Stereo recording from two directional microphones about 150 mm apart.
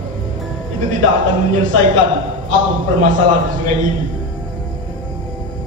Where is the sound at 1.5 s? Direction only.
65° right (ahead or behind).